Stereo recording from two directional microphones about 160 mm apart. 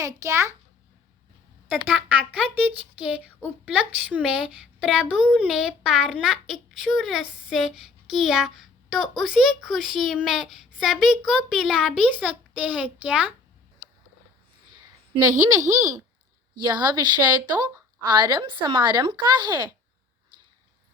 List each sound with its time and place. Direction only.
0.0 s a child's voice: 20° right (ahead or behind)
1.8 s speech: 10° right (ahead or behind)
16.6 s speech: 25° right (ahead or behind)